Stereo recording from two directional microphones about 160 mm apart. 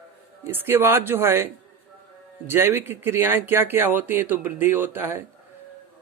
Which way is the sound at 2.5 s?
15° right (ahead or behind).